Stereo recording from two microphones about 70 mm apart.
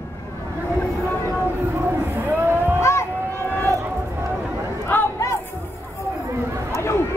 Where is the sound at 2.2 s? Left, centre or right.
Right.